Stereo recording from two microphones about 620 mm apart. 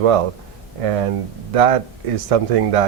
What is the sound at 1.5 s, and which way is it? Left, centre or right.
Speech, right.